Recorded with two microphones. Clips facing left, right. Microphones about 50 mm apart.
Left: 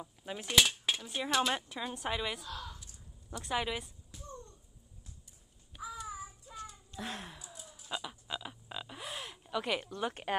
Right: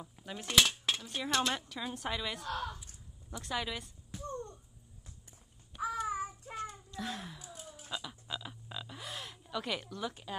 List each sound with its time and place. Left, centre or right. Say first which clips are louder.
0.0 s cutlery: left 2 dB; centre
1.8 s speech: left 1 dB; centre
2.4 s speech: right 6 dB; right
3.4 s speech: left 3 dB; centre
4.1 s music: right 9 dB; right
6.0 s child singing: right 7 dB; right
7.0 s a sound: right 1 dB; left
7.5 s a sound: right 4 dB; right
7.9 s frog: left 2 dB; centre
9.8 s speech: left 3 dB; left